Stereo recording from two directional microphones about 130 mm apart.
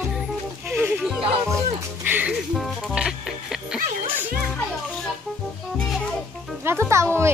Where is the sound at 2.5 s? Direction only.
5° right (ahead or behind).